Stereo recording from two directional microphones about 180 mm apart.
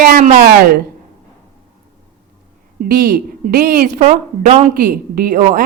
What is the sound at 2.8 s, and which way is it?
A woman's voice, 55° right (ahead or behind).